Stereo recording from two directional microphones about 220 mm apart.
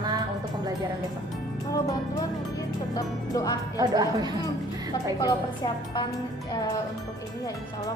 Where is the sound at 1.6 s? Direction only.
15° left (ahead or behind).